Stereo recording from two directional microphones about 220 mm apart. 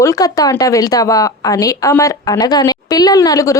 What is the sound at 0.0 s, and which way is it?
A woman's voice, 15° left (ahead or behind).